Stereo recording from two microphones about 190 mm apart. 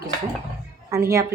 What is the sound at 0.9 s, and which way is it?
Speech, 15° right (ahead or behind).